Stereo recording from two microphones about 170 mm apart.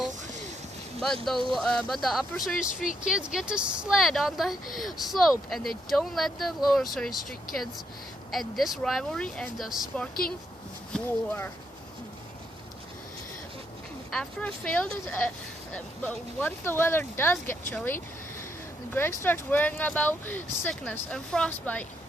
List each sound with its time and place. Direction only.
0.1 s a sound: 45° right (ahead or behind)
0.9 s speech: centre (ahead or behind)
10.9 s speech: 10° left (ahead or behind)
14.1 s speech: 5° left (ahead or behind)